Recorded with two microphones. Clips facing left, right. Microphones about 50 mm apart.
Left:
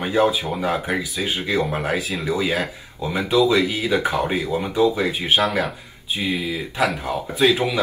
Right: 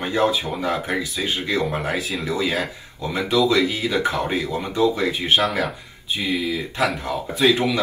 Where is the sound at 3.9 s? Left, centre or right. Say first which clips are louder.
Left 1 dB; left.